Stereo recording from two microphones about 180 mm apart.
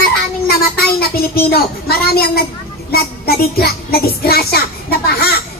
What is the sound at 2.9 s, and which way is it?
A child's voice, 60° left (ahead or behind).